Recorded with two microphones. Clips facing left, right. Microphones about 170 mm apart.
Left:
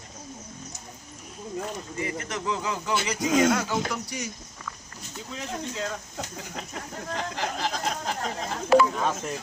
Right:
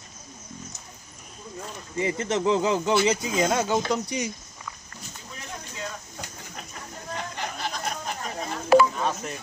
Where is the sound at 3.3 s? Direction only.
75° left (ahead or behind).